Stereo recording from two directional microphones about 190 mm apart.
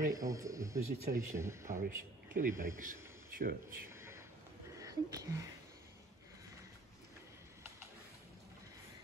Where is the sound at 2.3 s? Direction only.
45° right (ahead or behind).